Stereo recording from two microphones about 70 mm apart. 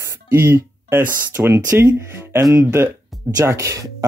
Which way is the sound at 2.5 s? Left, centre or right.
Right.